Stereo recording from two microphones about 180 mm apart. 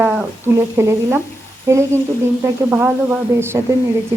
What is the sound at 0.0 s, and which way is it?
A woman's voice, 10° right (ahead or behind).